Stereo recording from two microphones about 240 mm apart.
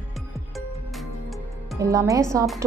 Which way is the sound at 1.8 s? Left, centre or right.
Centre.